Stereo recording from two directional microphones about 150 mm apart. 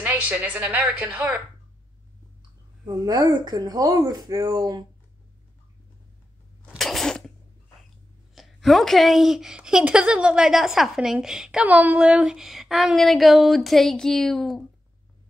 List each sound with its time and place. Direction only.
0.0 s a woman's voice: 10° right (ahead or behind)
2.8 s speech: 25° right (ahead or behind)
6.7 s a sound: centre (ahead or behind)
8.4 s speech: centre (ahead or behind)